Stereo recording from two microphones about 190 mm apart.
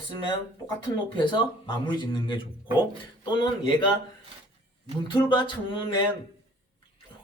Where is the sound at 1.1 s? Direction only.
25° left (ahead or behind).